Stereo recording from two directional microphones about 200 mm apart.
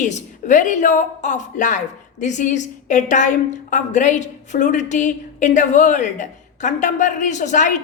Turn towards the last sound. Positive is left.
turn(degrees=40)  # may be behind; listen again after turning